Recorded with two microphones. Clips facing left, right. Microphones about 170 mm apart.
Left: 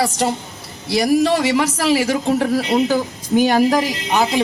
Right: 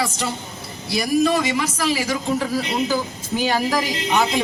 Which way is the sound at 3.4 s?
40° left (ahead or behind).